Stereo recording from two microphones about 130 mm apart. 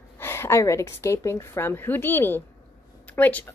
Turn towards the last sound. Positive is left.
turn(degrees=15)  # may be behind; listen again after turning